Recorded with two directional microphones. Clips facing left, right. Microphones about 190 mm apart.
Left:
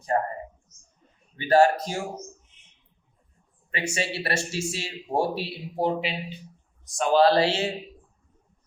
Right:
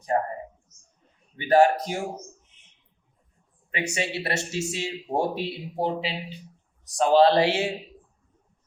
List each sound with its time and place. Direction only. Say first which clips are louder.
0.1 s speech: even; 5° right (ahead or behind)
1.4 s speech: even; 15° right (ahead or behind)
3.7 s speech: even; 20° right (ahead or behind)